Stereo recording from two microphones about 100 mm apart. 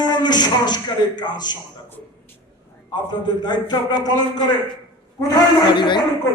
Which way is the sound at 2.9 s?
45° left (ahead or behind).